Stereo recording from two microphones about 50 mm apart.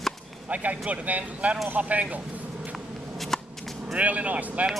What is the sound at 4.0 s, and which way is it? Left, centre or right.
Speech, right.